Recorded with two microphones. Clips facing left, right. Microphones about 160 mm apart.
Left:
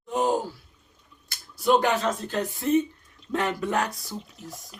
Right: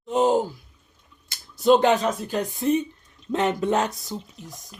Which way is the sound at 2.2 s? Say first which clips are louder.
Right 2 dB; 15° right (ahead or behind).